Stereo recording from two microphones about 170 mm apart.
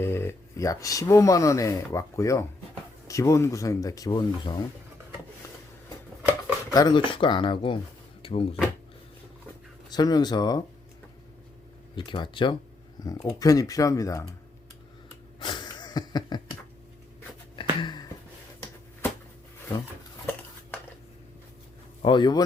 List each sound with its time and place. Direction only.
0.0 s speech: 15° left (ahead or behind)
6.7 s speech: 25° left (ahead or behind)
9.9 s speech: 25° left (ahead or behind)
11.9 s speech: 30° left (ahead or behind)
15.4 s a sound: 25° left (ahead or behind)
17.6 s a sound: 25° left (ahead or behind)
22.0 s speech: 25° left (ahead or behind)